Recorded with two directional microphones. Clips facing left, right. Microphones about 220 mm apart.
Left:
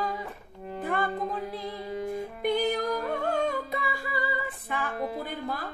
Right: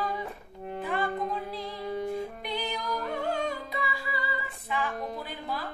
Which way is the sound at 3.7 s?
50° left (ahead or behind).